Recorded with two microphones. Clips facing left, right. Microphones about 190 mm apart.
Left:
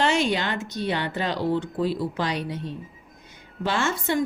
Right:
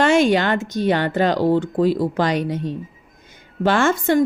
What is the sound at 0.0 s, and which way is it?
A woman's voice, 50° right (ahead or behind).